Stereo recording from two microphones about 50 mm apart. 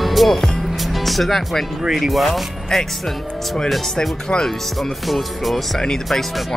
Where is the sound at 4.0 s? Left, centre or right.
Centre.